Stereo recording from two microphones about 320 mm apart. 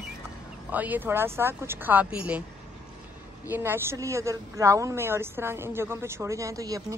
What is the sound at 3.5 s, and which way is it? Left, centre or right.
A woman's voice, centre.